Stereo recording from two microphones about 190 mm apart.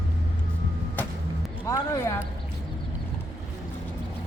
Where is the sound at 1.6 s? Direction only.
15° left (ahead or behind).